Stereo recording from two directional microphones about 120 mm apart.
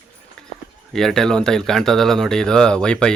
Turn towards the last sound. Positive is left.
turn(degrees=5)  # may be behind; listen again after turning